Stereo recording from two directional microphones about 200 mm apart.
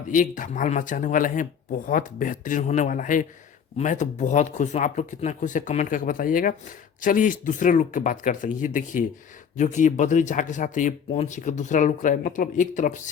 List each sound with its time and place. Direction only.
0.1 s speech: 40° left (ahead or behind)